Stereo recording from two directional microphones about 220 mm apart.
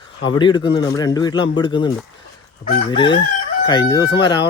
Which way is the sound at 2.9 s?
20° left (ahead or behind).